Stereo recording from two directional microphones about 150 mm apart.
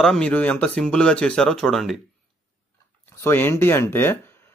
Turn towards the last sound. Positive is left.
turn(degrees=15)  # may be behind; listen again after turning